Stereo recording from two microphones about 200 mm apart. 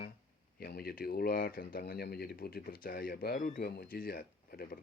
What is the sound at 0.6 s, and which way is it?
Speech, 50° left (ahead or behind).